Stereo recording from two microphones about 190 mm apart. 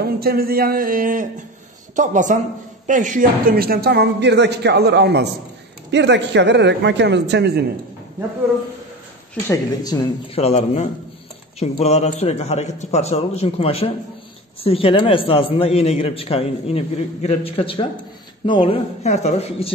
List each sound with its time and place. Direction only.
0.0 s speech: 55° right (ahead or behind)
9.3 s speech: 20° left (ahead or behind)
10.4 s a man's voice: 35° left (ahead or behind)